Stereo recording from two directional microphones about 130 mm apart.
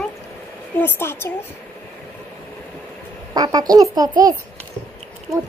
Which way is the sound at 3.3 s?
30° right (ahead or behind).